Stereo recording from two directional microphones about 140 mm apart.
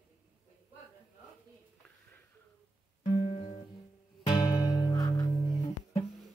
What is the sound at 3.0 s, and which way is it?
Music, 40° left (ahead or behind).